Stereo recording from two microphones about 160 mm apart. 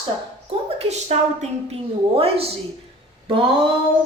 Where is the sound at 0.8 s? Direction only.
45° right (ahead or behind).